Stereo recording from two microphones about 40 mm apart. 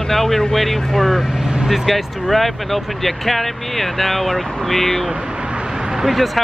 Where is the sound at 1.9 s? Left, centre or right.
Centre.